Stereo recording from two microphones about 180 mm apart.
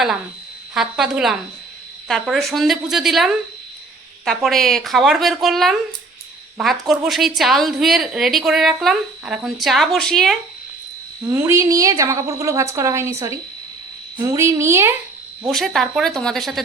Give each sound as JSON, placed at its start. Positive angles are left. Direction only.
{"t": 0.7, "sound": "a woman's voice", "side_deg": -5}
{"t": 6.8, "sound": "a woman's voice", "side_deg": 0}
{"t": 11.3, "sound": "a woman's voice", "side_deg": -15}
{"t": 15.4, "sound": "a woman's voice", "side_deg": 0}